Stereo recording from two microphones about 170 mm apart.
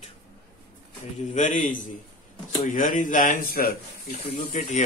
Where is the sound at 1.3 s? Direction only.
50° left (ahead or behind).